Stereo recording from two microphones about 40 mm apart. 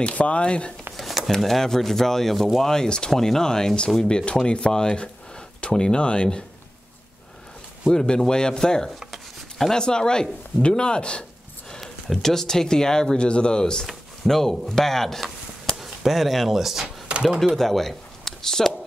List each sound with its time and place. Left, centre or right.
0.0 s speech: left
0.9 s a sound: centre
1.4 s speech: centre; by 6.4 s left
7.9 s speech: centre
9.1 s a sound: centre
9.8 s speech: centre
11.8 s speech: centre
14.2 s speech: centre
15.8 s speech: centre
17.1 s a sound: right
17.6 s speech: centre